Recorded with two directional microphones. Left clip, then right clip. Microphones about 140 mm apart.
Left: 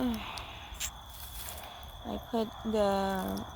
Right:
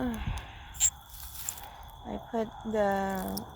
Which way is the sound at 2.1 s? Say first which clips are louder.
Even; 10° left (ahead or behind).